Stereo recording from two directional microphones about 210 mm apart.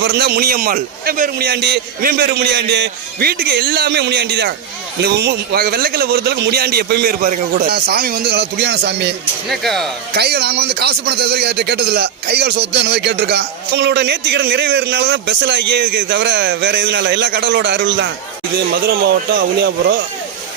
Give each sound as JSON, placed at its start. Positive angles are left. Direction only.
{"t": 0.0, "sound": "speech", "side_deg": -50}
{"t": 9.5, "sound": "speech", "side_deg": 0}
{"t": 10.2, "sound": "speech", "side_deg": -50}